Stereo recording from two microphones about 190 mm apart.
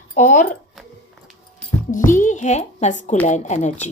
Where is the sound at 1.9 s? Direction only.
45° left (ahead or behind).